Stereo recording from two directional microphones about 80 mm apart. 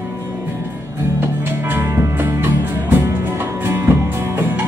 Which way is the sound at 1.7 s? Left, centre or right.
Right.